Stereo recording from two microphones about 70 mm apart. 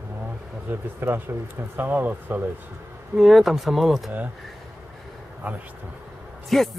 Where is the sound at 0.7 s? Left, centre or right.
Right.